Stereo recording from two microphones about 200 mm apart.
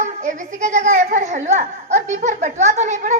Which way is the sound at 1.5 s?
35° right (ahead or behind).